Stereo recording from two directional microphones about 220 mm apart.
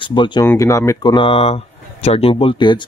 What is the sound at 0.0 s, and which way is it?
Speech, 20° left (ahead or behind).